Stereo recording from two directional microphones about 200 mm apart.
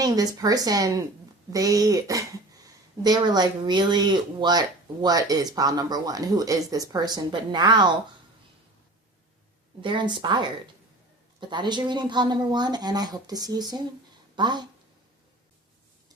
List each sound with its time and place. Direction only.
0.0 s speech: 20° right (ahead or behind)
9.8 s speech: 25° right (ahead or behind)